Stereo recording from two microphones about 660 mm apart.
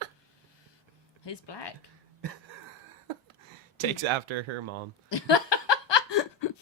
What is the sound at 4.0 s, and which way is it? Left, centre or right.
Speech, right.